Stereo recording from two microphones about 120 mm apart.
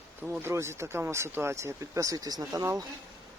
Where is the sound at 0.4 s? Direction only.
20° right (ahead or behind).